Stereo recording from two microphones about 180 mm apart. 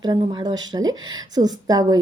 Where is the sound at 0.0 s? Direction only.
25° right (ahead or behind).